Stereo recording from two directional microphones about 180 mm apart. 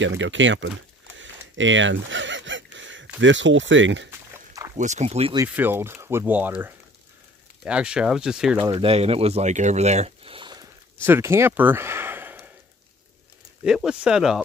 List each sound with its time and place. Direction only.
0.0 s speech: 90° right
1.1 s a sound: 90° right
3.2 s speech: 90° right
4.1 s a sound: 15° right (ahead or behind)
4.7 s speech: 40° right (ahead or behind)
5.5 s speech: 10° right (ahead or behind)
8.7 s speech: 35° right (ahead or behind)
11.1 s speech: 15° right (ahead or behind)
13.7 s speech: 5° right (ahead or behind)